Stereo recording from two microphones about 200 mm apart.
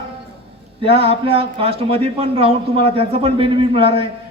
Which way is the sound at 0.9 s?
30° right (ahead or behind).